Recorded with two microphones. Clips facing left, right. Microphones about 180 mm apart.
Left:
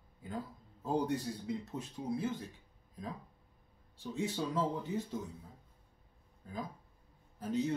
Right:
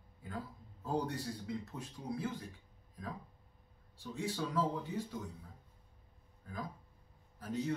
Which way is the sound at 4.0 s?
20° left (ahead or behind).